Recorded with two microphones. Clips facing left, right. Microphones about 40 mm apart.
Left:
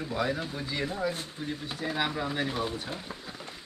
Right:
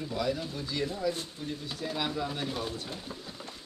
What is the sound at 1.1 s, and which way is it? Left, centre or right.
Speech, left.